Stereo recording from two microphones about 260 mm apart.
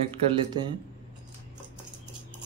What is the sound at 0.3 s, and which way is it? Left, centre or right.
Speech, centre.